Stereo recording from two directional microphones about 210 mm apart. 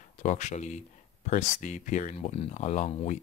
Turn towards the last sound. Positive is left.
turn(degrees=30)  # may be behind; listen again after turning